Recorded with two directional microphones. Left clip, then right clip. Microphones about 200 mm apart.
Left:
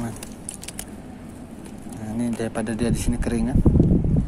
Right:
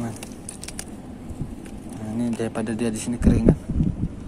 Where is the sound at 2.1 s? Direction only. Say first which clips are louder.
Even; 5° left (ahead or behind).